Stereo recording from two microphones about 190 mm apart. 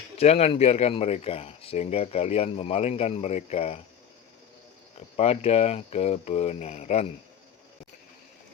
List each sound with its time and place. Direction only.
0.2 s speech: 35° left (ahead or behind)
4.9 s speech: 30° left (ahead or behind)